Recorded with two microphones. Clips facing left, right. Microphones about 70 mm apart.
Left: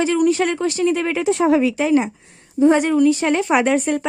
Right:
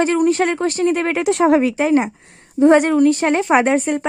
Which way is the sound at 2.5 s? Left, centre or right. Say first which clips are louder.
Right 2 dB; right.